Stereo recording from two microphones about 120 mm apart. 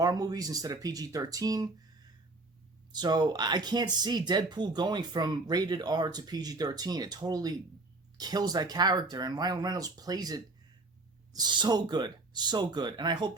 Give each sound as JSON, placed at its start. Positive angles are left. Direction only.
{"t": 0.0, "sound": "speech", "side_deg": -30}